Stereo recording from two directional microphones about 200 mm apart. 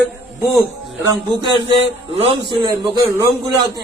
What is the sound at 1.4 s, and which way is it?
A man's voice, 25° right (ahead or behind).